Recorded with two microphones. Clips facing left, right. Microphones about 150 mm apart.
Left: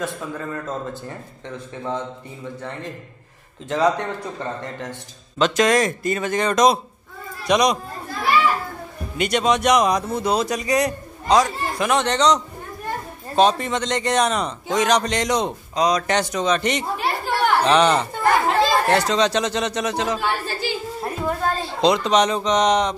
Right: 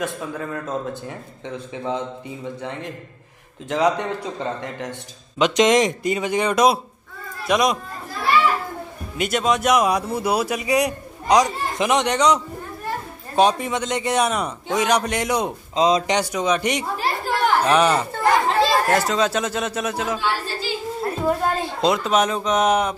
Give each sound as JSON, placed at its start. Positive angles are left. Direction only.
{"t": 0.4, "sound": "speech", "side_deg": -5}
{"t": 3.6, "sound": "speech", "side_deg": -10}
{"t": 9.2, "sound": "speech", "side_deg": 0}
{"t": 13.4, "sound": "speech", "side_deg": -10}
{"t": 15.7, "sound": "speech", "side_deg": -25}
{"t": 16.1, "sound": "speech", "side_deg": -10}
{"t": 17.0, "sound": "chatter", "side_deg": 0}
{"t": 20.2, "sound": "a sound", "side_deg": 55}
{"t": 21.5, "sound": "a sound", "side_deg": -15}
{"t": 21.8, "sound": "speech", "side_deg": -5}